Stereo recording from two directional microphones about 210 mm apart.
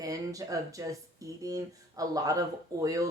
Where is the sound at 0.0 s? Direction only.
15° right (ahead or behind).